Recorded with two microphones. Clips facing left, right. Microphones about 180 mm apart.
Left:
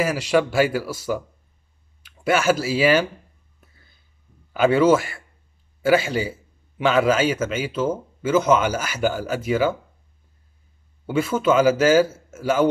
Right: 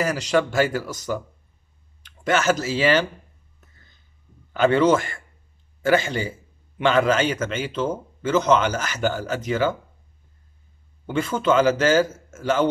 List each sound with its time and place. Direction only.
0.0 s a man's voice: 10° left (ahead or behind)
4.6 s a man's voice: 10° left (ahead or behind)
11.1 s a man's voice: 10° left (ahead or behind)